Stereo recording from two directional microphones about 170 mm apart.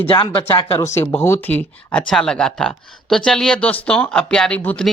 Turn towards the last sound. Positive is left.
turn(degrees=10)  # may be behind; listen again after turning